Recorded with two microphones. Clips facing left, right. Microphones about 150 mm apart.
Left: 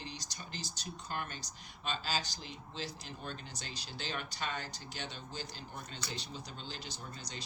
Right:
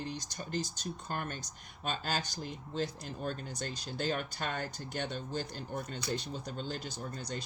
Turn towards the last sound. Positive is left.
turn(degrees=-50)  # may be behind; listen again after turning